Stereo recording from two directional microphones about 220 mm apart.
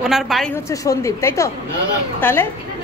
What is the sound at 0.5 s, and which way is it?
A woman's voice, 15° left (ahead or behind).